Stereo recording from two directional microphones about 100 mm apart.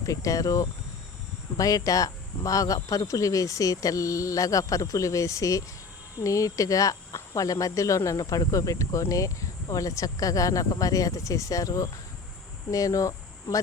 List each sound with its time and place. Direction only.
0.0 s speech: 35° left (ahead or behind)